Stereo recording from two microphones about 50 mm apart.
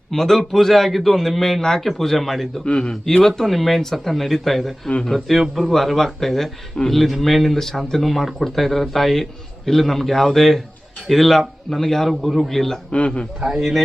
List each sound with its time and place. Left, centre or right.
0.1 s a man's voice: centre
2.6 s a man's voice: centre
3.2 s a man's voice: centre
12.9 s a man's voice: left
13.4 s a man's voice: centre